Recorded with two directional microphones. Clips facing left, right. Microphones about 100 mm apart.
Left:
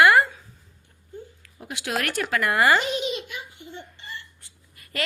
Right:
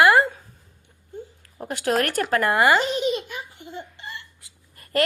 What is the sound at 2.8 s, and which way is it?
Speech, 40° right (ahead or behind).